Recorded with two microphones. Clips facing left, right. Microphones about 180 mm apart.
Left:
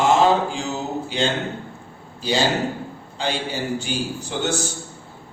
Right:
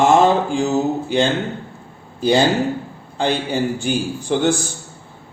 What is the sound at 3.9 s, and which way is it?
Speech, 50° right (ahead or behind).